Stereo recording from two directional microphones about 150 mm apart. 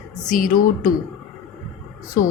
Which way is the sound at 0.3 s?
60° left (ahead or behind).